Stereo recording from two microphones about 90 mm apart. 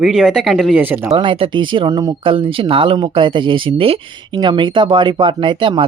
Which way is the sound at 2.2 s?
75° right (ahead or behind).